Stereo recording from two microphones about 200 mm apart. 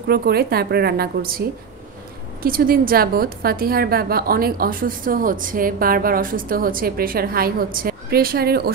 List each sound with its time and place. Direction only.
0.1 s a woman's voice: 50° right (ahead or behind)